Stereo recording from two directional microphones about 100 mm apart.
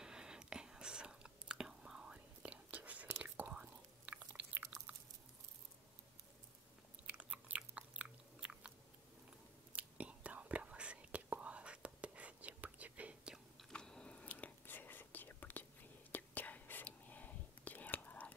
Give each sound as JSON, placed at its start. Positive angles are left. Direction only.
{"t": 0.0, "sound": "whispering", "side_deg": -5}
{"t": 3.2, "sound": "chewing", "side_deg": -15}
{"t": 7.1, "sound": "biting", "side_deg": -15}
{"t": 9.7, "sound": "whispering", "side_deg": -15}
{"t": 13.7, "sound": "whispering", "side_deg": 5}